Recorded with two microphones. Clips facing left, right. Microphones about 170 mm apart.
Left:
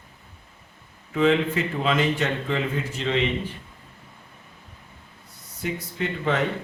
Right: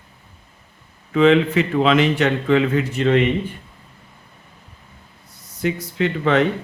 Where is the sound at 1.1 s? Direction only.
80° right.